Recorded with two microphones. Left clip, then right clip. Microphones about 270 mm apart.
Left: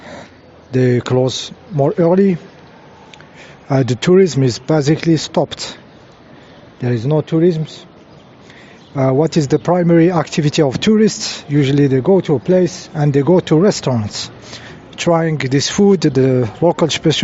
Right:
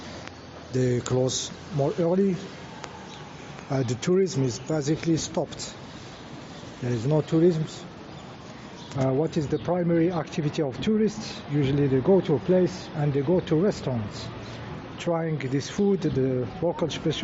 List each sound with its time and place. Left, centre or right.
0.7 s speech: left
3.7 s speech: left
6.8 s speech: left
9.0 s speech: left